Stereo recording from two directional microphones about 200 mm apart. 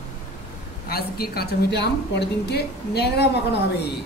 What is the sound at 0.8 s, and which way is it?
A woman's voice, 50° left (ahead or behind).